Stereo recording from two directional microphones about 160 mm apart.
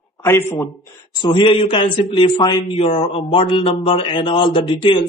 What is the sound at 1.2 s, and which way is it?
Speech, 30° left (ahead or behind).